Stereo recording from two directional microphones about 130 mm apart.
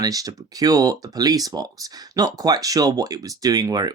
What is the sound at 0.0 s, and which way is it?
Speech, 30° right (ahead or behind).